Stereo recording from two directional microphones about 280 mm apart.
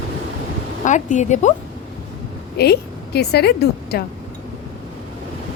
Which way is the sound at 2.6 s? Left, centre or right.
Left.